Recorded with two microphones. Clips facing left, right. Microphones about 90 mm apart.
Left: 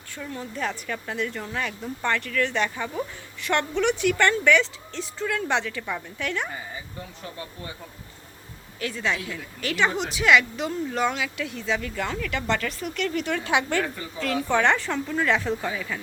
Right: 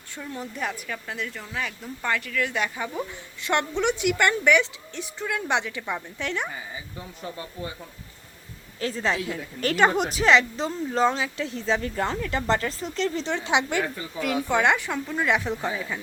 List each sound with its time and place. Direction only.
0.2 s a woman's voice: 10° right (ahead or behind)
8.8 s a woman's voice: 35° right (ahead or behind)